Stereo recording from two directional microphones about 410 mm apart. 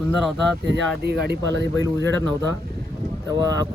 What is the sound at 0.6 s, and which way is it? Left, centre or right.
Speech, right.